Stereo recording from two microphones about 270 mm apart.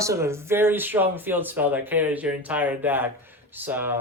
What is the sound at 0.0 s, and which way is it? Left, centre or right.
Speech, centre.